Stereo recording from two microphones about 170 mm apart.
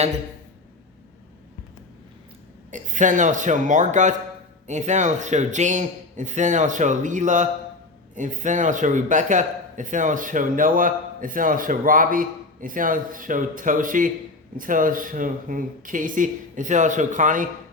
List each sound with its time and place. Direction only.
2.6 s a man's voice: 45° right (ahead or behind)